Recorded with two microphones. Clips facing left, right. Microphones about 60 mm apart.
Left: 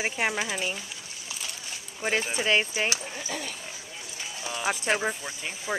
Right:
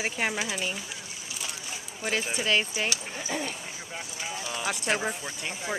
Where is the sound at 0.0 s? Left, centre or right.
Centre.